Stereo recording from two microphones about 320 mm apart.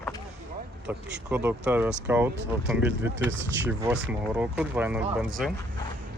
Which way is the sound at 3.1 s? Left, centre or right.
Right.